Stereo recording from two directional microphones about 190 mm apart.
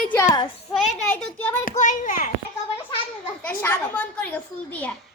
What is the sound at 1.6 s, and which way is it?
Speech, 40° left (ahead or behind).